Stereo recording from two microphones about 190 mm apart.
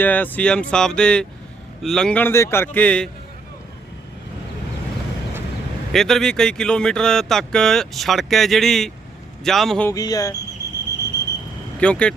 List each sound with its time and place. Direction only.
0.0 s a man's voice: 10° left (ahead or behind)
5.9 s speech: centre (ahead or behind)
9.9 s speech: 20° left (ahead or behind)
11.8 s speech: 5° left (ahead or behind)